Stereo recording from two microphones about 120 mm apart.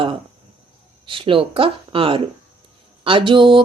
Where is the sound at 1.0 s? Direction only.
45° right (ahead or behind).